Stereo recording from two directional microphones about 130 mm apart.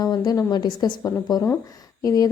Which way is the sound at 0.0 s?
30° left (ahead or behind).